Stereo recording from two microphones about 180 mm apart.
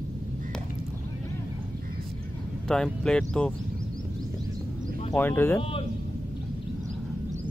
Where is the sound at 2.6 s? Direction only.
5° left (ahead or behind).